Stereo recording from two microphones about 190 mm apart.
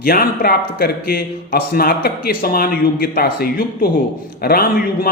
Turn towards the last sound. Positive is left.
turn(degrees=50)  # may be behind; listen again after turning